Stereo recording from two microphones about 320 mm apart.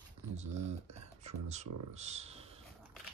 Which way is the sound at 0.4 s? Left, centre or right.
Right.